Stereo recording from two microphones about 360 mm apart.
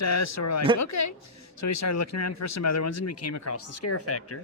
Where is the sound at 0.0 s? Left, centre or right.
Left.